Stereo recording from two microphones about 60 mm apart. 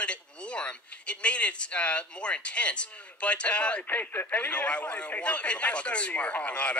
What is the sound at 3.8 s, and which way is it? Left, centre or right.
A man's voice, left.